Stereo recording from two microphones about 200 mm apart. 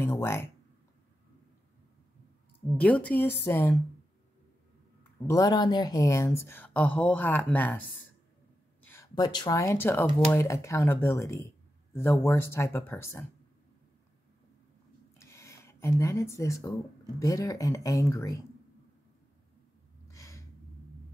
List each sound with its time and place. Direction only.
0.1 s speech: 15° left (ahead or behind)
2.8 s speech: 5° left (ahead or behind)
5.2 s speech: 20° left (ahead or behind)
8.8 s speech: 15° left (ahead or behind)
15.1 s a sound: 15° left (ahead or behind)
17.2 s speech: 15° left (ahead or behind)
20.1 s a sound: 15° left (ahead or behind)